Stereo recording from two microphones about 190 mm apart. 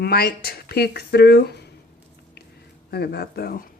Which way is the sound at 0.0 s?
55° left (ahead or behind).